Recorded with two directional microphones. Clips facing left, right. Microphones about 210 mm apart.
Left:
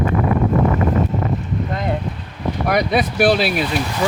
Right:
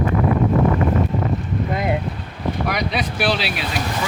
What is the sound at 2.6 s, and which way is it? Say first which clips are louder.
Speech: left 10 dB; 50° left (ahead or behind).